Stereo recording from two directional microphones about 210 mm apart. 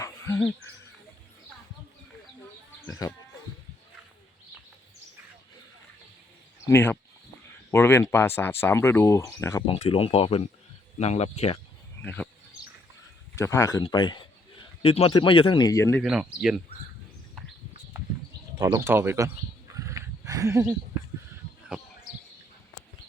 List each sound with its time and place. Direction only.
0.0 s a sound: 15° left (ahead or behind)
3.0 s speech: 15° left (ahead or behind)
6.7 s speech: 10° left (ahead or behind)
9.6 s speech: 30° left (ahead or behind)
12.0 s speech: 5° left (ahead or behind)
13.3 s a man's voice: 15° left (ahead or behind)
16.0 s speech: 5° right (ahead or behind)
18.6 s speech: 15° right (ahead or behind)